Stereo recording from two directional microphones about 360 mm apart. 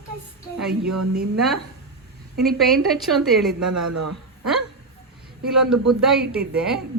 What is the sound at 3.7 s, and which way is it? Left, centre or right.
Speech, right.